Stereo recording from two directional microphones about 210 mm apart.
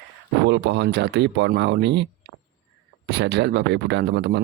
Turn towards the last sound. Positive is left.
turn(degrees=-55)  # may be behind; listen again after turning